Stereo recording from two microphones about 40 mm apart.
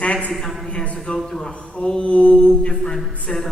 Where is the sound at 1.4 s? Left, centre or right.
Left.